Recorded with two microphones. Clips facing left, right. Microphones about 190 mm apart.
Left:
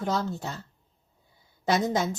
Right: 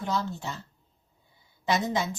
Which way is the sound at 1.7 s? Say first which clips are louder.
Left 2 dB; 45° left (ahead or behind).